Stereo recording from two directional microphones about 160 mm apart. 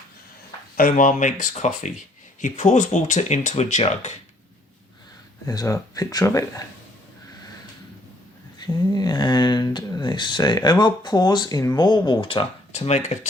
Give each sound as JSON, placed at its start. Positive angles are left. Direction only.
{"t": 0.8, "sound": "speech", "side_deg": 60}
{"t": 5.5, "sound": "speech", "side_deg": 20}
{"t": 8.5, "sound": "speech", "side_deg": 25}